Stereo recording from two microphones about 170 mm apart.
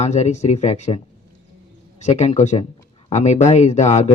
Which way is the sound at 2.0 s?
40° left (ahead or behind).